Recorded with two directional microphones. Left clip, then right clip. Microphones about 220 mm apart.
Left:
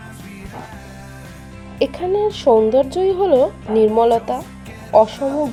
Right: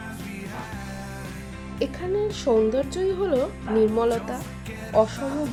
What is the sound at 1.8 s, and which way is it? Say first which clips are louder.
A woman's voice: left 8 dB; 20° left (ahead or behind).